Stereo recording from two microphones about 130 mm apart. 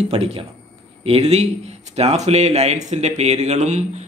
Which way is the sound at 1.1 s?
50° right (ahead or behind).